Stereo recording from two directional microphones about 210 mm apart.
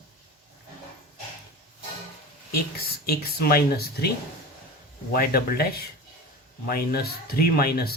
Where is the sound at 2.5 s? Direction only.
45° left (ahead or behind).